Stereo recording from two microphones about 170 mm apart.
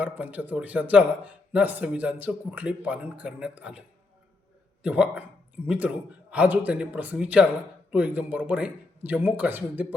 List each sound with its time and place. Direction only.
0.0 s speech: 10° right (ahead or behind)